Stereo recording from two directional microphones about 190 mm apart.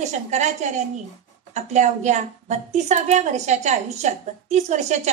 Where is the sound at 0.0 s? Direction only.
40° right (ahead or behind).